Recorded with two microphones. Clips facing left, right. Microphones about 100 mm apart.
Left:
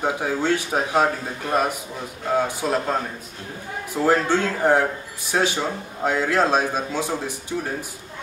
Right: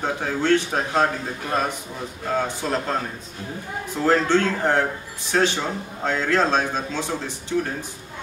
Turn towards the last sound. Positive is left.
turn(degrees=10)  # may be behind; listen again after turning